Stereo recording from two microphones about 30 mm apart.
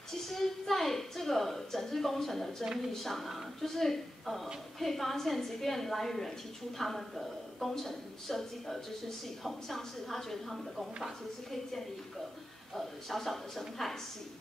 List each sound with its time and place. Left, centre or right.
0.3 s a woman's voice: centre
12.7 s a woman's voice: centre